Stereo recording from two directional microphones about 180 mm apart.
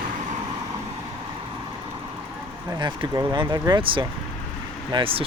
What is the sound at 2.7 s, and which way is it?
Speech, 25° right (ahead or behind).